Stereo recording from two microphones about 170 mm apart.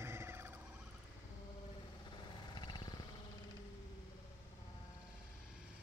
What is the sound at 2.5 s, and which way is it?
Helicopter, 25° left (ahead or behind).